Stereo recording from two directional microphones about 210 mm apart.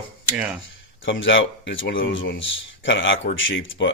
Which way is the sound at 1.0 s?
60° left (ahead or behind).